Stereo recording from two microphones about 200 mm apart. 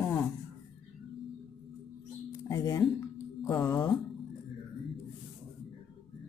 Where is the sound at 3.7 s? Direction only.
5° left (ahead or behind).